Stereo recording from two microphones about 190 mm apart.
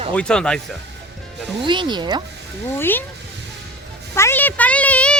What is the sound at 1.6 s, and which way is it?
Speech, 25° right (ahead or behind).